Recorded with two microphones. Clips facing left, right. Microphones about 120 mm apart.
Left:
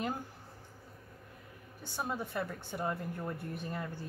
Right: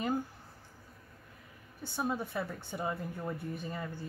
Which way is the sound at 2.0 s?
Centre (ahead or behind).